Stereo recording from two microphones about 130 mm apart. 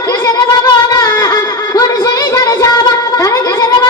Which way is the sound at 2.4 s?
30° left (ahead or behind).